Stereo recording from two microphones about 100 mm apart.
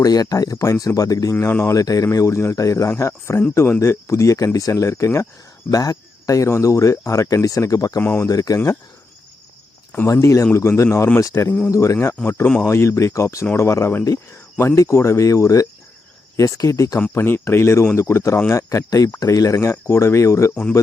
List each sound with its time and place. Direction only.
0.0 s speech: 40° left (ahead or behind)
8.0 s speech: 20° left (ahead or behind)
8.3 s speech: 35° left (ahead or behind)
10.1 s speech: 30° left (ahead or behind)
17.0 s speech: 20° left (ahead or behind)